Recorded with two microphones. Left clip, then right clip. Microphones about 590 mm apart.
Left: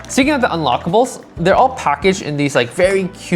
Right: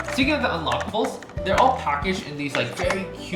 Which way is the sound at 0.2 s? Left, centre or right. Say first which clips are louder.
Left 9 dB; left.